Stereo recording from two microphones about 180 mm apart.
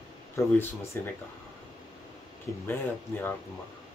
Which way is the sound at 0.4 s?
15° left (ahead or behind).